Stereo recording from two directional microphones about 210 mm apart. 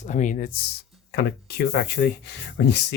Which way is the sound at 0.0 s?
35° left (ahead or behind).